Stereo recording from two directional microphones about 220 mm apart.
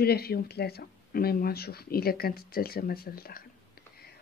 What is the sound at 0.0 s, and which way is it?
A woman's voice, 45° left (ahead or behind).